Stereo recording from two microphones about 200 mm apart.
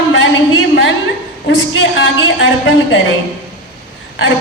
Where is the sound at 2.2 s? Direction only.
65° left (ahead or behind).